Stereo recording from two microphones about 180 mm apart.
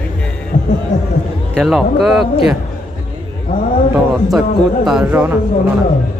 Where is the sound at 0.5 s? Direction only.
45° left (ahead or behind).